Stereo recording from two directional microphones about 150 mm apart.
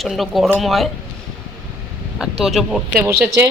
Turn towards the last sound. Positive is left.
turn(degrees=-15)  # may be behind; listen again after turning